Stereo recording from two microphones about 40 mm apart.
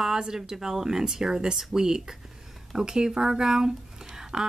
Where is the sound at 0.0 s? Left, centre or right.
Centre.